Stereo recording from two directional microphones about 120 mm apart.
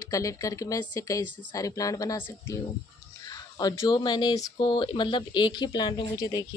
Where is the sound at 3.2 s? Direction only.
30° left (ahead or behind).